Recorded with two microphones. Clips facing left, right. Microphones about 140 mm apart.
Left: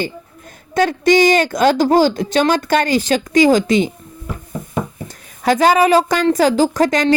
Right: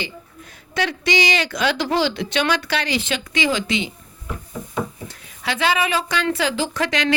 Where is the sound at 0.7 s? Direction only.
45° left (ahead or behind).